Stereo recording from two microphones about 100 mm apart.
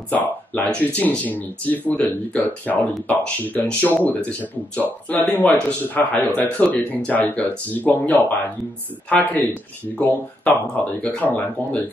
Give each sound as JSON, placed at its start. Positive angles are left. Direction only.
{"t": 0.1, "sound": "speech", "side_deg": 15}